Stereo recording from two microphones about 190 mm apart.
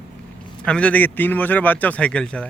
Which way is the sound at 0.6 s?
5° left (ahead or behind).